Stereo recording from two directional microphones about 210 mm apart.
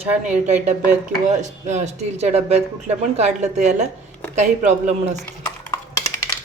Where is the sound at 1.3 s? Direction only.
35° right (ahead or behind).